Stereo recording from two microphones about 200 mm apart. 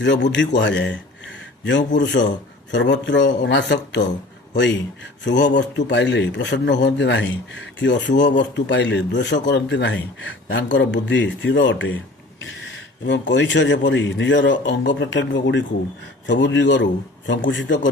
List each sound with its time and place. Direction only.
0.0 s speech: 60° left (ahead or behind)
2.0 s speech: 60° left (ahead or behind)